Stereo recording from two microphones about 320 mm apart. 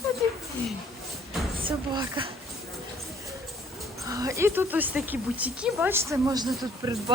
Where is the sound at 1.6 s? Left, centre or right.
Centre.